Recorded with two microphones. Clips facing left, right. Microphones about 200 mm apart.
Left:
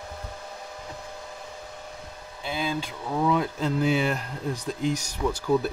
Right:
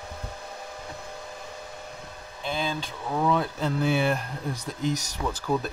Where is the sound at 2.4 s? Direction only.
5° left (ahead or behind).